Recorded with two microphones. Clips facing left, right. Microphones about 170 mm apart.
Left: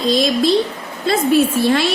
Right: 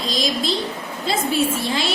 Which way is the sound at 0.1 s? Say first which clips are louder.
Left 8 dB; 60° left (ahead or behind).